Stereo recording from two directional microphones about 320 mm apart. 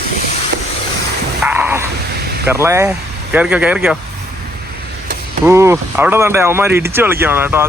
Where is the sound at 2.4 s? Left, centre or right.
Centre.